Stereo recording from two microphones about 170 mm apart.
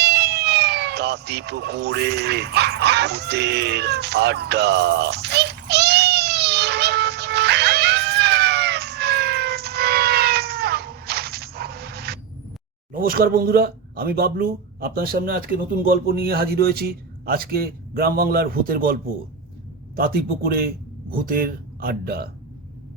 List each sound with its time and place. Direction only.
0.0 s a sound: 75° right (ahead or behind)
12.9 s a man's voice: 60° right (ahead or behind)
20.0 s a man's voice: 60° right (ahead or behind)